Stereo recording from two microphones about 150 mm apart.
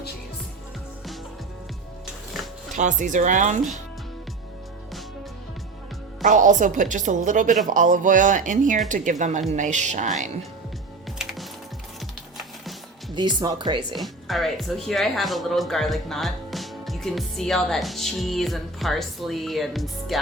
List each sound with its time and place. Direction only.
2.7 s a woman's voice: 55° right (ahead or behind)
6.2 s a woman's voice: 60° right (ahead or behind)
11.2 s music: 5° right (ahead or behind)
13.1 s speech: 30° right (ahead or behind)
13.9 s speech: centre (ahead or behind)